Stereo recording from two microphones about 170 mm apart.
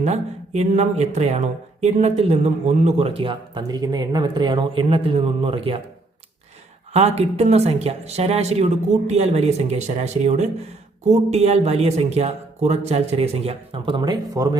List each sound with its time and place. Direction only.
0.0 s speech: 40° right (ahead or behind)
6.9 s speech: 40° right (ahead or behind)